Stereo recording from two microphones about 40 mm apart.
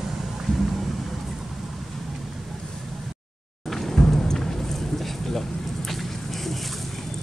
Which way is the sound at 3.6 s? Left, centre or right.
Centre.